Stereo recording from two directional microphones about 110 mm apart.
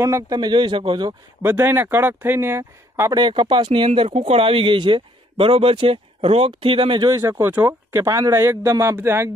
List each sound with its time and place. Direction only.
0.0 s speech: 30° right (ahead or behind)
1.4 s speech: 20° right (ahead or behind)
3.1 s speech: 45° right (ahead or behind)
3.6 s speech: 60° right (ahead or behind)
7.1 s speech: 30° right (ahead or behind)